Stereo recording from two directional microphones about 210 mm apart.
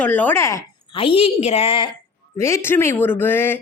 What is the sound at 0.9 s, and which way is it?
A woman's voice, 25° left (ahead or behind).